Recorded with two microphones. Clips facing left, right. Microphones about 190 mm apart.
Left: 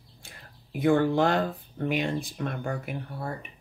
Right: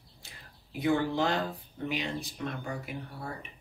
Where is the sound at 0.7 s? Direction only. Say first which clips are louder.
Left 5 dB; 50° left (ahead or behind).